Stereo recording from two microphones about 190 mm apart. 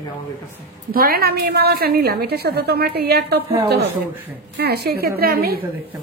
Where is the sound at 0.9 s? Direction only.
50° right (ahead or behind).